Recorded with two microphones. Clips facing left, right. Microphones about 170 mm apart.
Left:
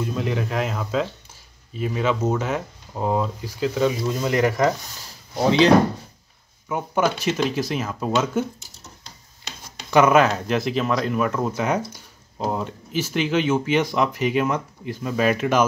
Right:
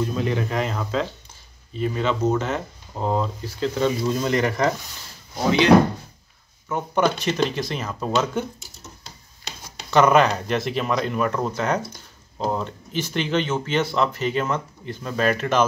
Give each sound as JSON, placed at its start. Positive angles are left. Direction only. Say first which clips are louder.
{"t": 0.0, "sound": "speech", "louder": "right 1 dB", "side_deg": 5}
{"t": 6.7, "sound": "speech", "louder": "even", "side_deg": 5}
{"t": 9.8, "sound": "speech", "louder": "left 1 dB", "side_deg": 5}